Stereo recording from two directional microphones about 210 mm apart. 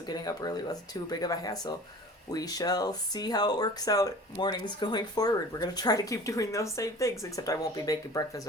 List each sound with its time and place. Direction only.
0.1 s speech: 20° left (ahead or behind)